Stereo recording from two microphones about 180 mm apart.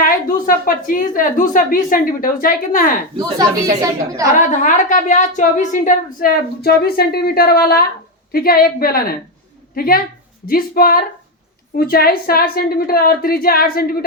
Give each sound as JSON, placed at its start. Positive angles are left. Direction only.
{"t": 0.0, "sound": "a woman's voice", "side_deg": 55}
{"t": 3.2, "sound": "a woman's voice", "side_deg": -20}
{"t": 4.4, "sound": "a woman's voice", "side_deg": 45}